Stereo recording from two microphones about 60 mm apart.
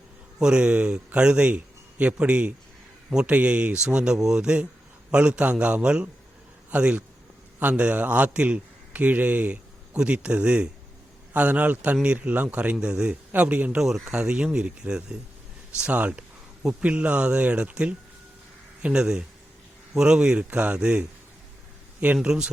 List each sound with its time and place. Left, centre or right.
0.3 s a man's voice: centre
13.7 s a man's voice: centre; by 22.3 s right
22.3 s speech: centre